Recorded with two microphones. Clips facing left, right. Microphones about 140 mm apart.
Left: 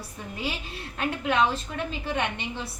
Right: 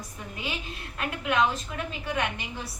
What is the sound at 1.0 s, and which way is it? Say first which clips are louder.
A woman's voice: left 2 dB; 30° left (ahead or behind).